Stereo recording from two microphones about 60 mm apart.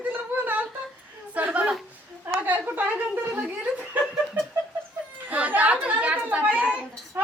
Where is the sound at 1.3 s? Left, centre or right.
Right.